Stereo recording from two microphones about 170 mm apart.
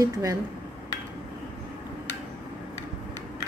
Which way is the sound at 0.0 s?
20° right (ahead or behind).